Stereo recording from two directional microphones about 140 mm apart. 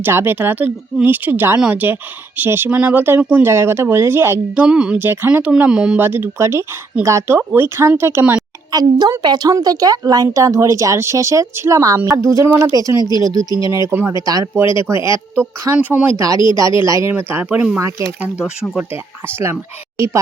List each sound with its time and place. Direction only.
0.0 s speech: 15° right (ahead or behind)
8.7 s a woman's voice: 30° right (ahead or behind); by 17.8 s 10° right (ahead or behind)
20.0 s a woman's voice: 20° right (ahead or behind)